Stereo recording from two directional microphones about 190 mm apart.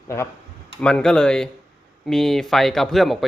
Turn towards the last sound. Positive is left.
turn(degrees=0)  # may be behind; listen again after turning